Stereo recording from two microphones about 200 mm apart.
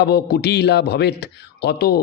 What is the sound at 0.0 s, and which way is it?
A man's voice, 50° left (ahead or behind).